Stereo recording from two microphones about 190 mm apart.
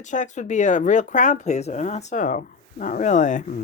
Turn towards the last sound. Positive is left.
turn(degrees=40)  # may be behind; listen again after turning